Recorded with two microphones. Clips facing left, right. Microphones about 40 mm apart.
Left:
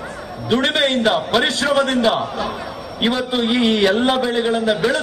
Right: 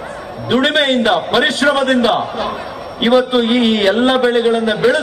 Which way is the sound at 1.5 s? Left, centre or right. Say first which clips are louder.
Right 4 dB; right.